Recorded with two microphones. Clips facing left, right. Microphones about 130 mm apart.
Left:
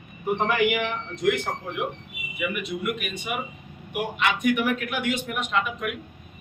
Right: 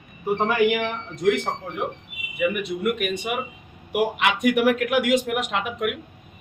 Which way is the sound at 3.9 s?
85° right.